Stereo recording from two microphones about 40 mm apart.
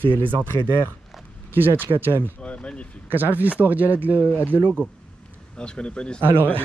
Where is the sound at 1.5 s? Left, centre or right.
Right.